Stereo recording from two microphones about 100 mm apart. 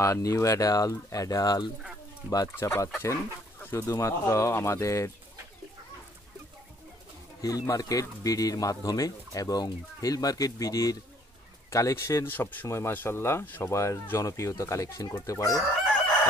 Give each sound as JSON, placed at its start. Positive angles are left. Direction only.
{"t": 0.0, "sound": "speech", "side_deg": 30}
{"t": 2.5, "sound": "speech", "side_deg": 25}
{"t": 7.4, "sound": "speech", "side_deg": 35}
{"t": 12.4, "sound": "speech", "side_deg": 20}